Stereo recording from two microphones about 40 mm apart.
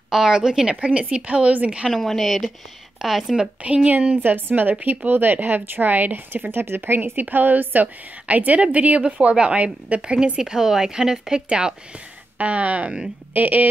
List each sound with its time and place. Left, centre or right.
0.1 s a woman's voice: centre
0.7 s speech: right
1.9 s a woman's voice: centre
3.0 s a woman's voice: centre
3.6 s a woman's voice: right
6.5 s speech: right
7.0 s a woman's voice: right
8.5 s speech: right
9.2 s a woman's voice: right
10.4 s a woman's voice: centre
12.4 s speech: right
13.3 s a woman's voice: right